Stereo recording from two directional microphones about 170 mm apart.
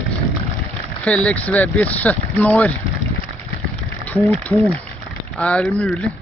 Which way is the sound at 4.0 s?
10° left (ahead or behind).